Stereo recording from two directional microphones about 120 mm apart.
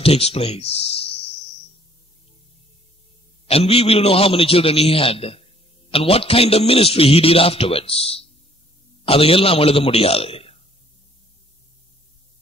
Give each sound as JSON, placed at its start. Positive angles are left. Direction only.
{"t": 0.0, "sound": "speech", "side_deg": 55}
{"t": 3.4, "sound": "a man's voice", "side_deg": 55}